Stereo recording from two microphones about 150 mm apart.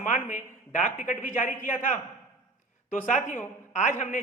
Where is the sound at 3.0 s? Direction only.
55° left (ahead or behind).